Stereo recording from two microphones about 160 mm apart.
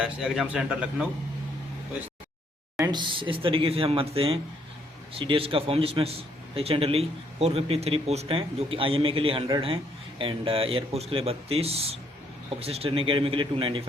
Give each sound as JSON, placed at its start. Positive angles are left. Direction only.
{"t": 0.0, "sound": "a man's voice", "side_deg": -5}
{"t": 2.7, "sound": "a man's voice", "side_deg": -25}